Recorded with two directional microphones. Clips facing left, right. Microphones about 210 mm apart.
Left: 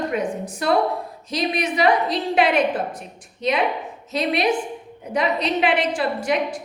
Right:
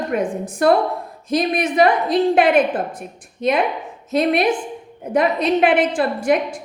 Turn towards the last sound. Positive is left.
turn(degrees=-50)  # may be behind; listen again after turning